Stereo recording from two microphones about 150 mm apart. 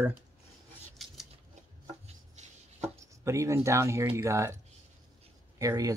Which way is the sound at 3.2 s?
20° right (ahead or behind).